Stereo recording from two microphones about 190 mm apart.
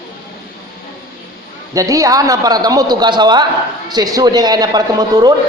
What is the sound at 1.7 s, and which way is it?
A man's voice, 15° right (ahead or behind).